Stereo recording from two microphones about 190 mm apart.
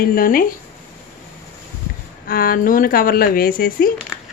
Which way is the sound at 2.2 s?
50° left (ahead or behind).